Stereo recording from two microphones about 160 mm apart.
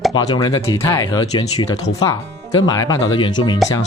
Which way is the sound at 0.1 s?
25° left (ahead or behind).